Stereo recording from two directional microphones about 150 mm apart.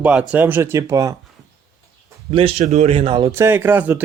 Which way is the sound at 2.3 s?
40° right (ahead or behind).